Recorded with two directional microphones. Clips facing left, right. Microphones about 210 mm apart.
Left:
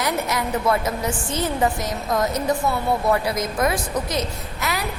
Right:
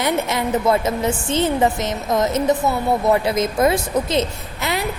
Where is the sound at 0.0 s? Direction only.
25° right (ahead or behind).